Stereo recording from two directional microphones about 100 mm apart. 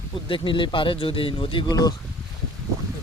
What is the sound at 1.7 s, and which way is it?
Speech, 40° left (ahead or behind).